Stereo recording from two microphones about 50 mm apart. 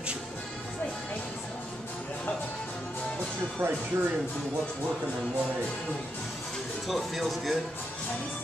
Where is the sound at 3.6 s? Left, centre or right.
Right.